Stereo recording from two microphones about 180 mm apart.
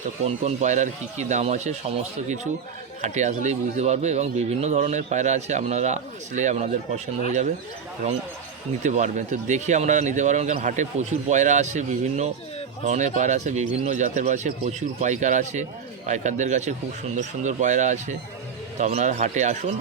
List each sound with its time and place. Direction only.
0.3 s speech: 40° right (ahead or behind)
3.0 s speech: 40° right (ahead or behind)
8.8 s speech: 40° right (ahead or behind)